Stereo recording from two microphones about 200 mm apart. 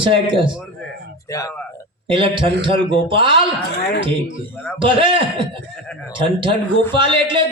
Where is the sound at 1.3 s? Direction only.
15° left (ahead or behind).